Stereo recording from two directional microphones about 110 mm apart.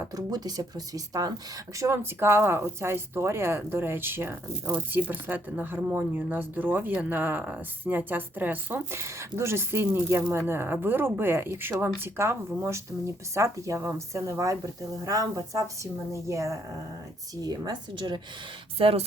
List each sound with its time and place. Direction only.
0.0 s speech: 35° right (ahead or behind)
17.4 s speech: 40° right (ahead or behind)
18.8 s speech: 60° right (ahead or behind)